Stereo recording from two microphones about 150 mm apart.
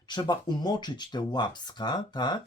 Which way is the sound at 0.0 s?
30° left (ahead or behind).